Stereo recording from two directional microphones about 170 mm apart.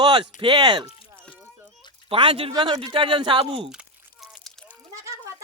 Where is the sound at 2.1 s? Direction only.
30° right (ahead or behind).